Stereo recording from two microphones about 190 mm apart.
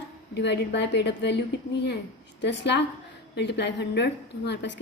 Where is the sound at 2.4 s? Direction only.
65° left (ahead or behind).